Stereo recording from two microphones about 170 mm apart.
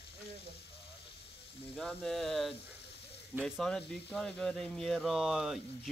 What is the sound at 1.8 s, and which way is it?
Speech, 5° left (ahead or behind).